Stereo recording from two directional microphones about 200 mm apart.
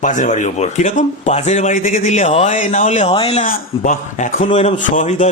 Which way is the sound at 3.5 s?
40° left (ahead or behind).